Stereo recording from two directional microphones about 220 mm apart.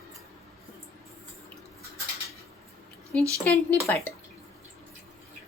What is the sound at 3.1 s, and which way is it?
Speech, 5° left (ahead or behind).